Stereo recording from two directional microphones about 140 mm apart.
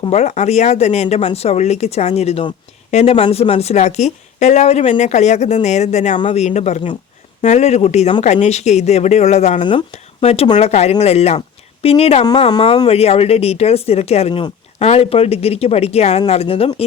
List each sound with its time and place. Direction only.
0.1 s speech: 55° left (ahead or behind)
9.6 s speech: 40° left (ahead or behind)